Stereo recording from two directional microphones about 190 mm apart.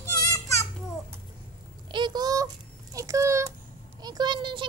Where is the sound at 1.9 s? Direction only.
20° right (ahead or behind).